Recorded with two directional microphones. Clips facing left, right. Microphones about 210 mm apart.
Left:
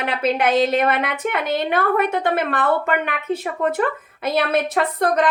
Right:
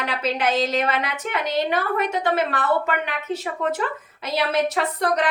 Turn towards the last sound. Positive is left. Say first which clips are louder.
# left 2 dB
turn(degrees=55)  # may be behind; listen again after turning